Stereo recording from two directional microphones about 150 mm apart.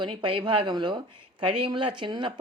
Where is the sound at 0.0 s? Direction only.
35° right (ahead or behind).